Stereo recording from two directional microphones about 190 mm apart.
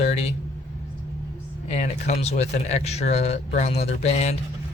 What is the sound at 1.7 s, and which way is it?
Speech, 35° left (ahead or behind).